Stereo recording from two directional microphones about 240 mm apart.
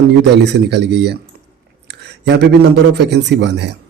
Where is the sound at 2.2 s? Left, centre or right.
Right.